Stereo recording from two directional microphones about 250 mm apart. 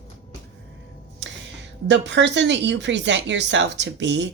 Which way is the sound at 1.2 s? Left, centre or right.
Right.